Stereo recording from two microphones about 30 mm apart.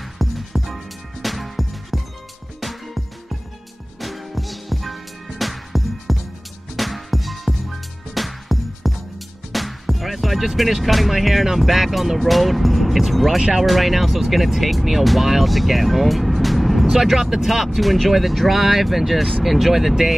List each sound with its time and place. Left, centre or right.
0.2 s music: centre
11.5 s speech: centre